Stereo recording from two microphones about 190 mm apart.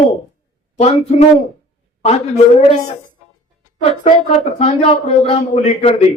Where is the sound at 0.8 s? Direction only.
35° left (ahead or behind).